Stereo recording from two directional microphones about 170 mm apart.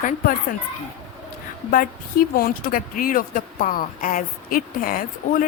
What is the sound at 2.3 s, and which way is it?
Speech, 60° left (ahead or behind).